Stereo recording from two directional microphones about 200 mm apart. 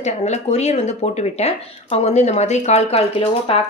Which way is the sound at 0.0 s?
35° left (ahead or behind).